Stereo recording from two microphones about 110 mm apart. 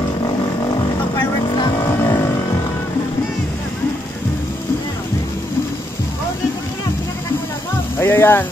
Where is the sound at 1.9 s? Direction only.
30° left (ahead or behind).